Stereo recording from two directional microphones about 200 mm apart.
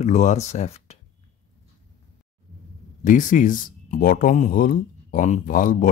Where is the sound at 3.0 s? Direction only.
40° left (ahead or behind).